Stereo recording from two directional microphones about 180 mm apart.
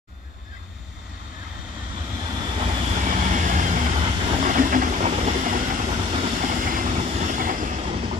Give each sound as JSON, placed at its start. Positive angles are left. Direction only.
{"t": 2.2, "sound": "vehicle", "side_deg": -25}
{"t": 2.9, "sound": "vehicle", "side_deg": -40}
{"t": 6.1, "sound": "train", "side_deg": -40}